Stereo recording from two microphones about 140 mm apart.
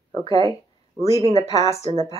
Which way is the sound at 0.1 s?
40° right (ahead or behind).